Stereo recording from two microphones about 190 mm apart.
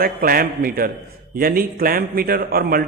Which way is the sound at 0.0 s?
50° right (ahead or behind).